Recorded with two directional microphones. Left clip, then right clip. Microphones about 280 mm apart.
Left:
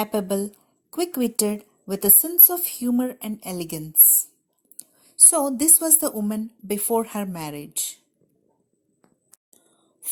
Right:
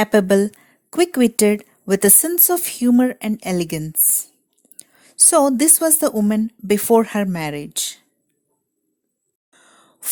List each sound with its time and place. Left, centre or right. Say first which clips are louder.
0.0 s a woman's voice: right 10 dB; right
4.9 s a woman's voice: right 7 dB; right